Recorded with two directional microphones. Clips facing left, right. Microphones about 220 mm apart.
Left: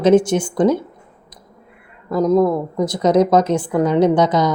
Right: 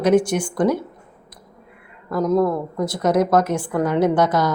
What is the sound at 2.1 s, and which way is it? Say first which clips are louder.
A woman's voice: left 4 dB; 20° left (ahead or behind).